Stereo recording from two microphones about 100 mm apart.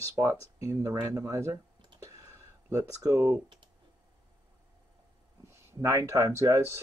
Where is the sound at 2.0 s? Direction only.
30° right (ahead or behind).